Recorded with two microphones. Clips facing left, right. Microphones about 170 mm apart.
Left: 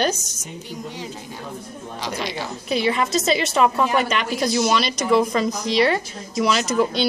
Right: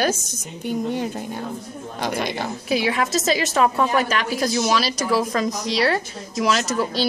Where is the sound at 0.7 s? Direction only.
55° right (ahead or behind).